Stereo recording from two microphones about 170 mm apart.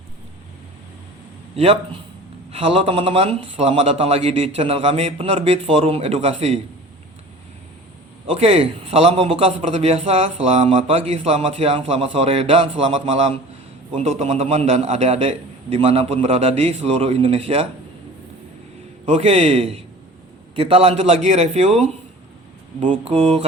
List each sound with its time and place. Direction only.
1.5 s a man's voice: 35° right (ahead or behind)
8.3 s a man's voice: 35° right (ahead or behind)
19.0 s a man's voice: 40° right (ahead or behind)
22.9 s a man's voice: 40° right (ahead or behind)